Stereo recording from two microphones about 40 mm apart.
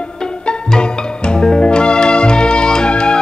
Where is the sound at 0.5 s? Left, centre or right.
Left.